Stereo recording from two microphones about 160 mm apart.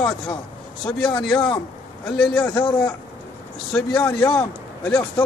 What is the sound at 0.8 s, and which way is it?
A man's voice, 5° left (ahead or behind).